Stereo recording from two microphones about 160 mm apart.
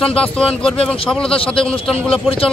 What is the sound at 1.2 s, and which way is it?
Speech, 35° left (ahead or behind).